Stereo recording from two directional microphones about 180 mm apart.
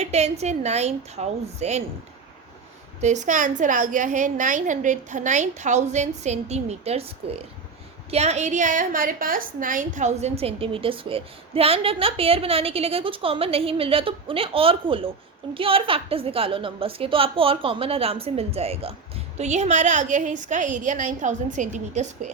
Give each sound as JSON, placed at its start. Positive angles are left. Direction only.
{"t": 0.0, "sound": "a woman's voice", "side_deg": -40}
{"t": 3.0, "sound": "a woman's voice", "side_deg": -40}